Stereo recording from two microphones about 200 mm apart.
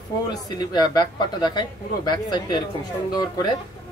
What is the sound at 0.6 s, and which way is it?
A man's voice, 20° left (ahead or behind).